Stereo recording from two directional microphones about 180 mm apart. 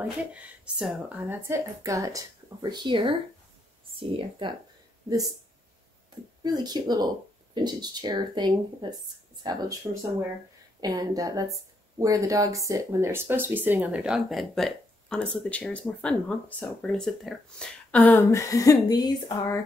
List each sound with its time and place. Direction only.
0.3 s a woman's voice: 5° right (ahead or behind); by 4.6 s 30° right (ahead or behind)
6.4 s speech: 25° right (ahead or behind)
10.8 s speech: 20° right (ahead or behind); by 19.6 s 20° left (ahead or behind)